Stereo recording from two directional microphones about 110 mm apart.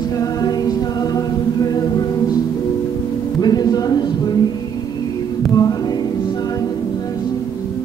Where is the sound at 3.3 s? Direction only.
40° left (ahead or behind).